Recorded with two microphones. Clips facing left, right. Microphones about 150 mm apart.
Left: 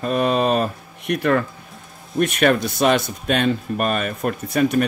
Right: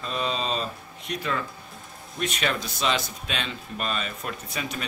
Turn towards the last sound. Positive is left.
turn(degrees=55)  # may be behind; listen again after turning